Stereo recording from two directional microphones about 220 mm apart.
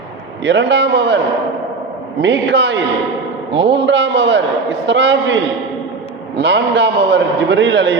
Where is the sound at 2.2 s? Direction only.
50° right (ahead or behind).